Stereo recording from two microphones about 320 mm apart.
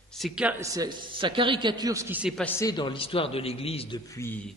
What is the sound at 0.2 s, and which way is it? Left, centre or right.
A man's voice, centre.